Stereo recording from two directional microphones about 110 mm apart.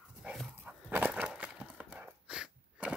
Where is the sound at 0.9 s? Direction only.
15° right (ahead or behind).